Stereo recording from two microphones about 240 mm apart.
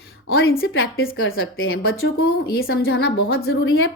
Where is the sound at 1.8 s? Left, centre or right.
Left.